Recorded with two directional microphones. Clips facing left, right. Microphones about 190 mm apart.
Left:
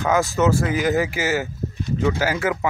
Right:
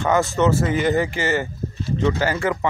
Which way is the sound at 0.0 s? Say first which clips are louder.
Even; centre (ahead or behind).